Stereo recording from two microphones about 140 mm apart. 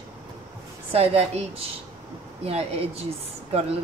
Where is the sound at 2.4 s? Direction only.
45° right (ahead or behind).